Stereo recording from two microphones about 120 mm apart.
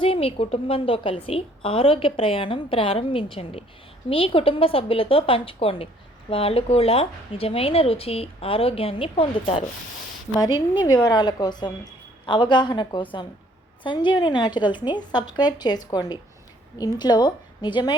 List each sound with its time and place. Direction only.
0.0 s a woman's voice: 50° left (ahead or behind)